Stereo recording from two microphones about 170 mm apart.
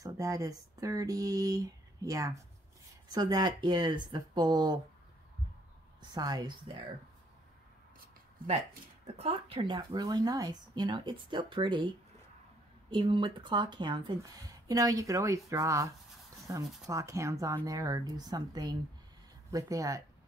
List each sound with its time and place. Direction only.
0.0 s speech: 20° right (ahead or behind)
6.1 s speech: 25° right (ahead or behind)
9.0 s speech: 35° right (ahead or behind)
12.9 s speech: 30° right (ahead or behind)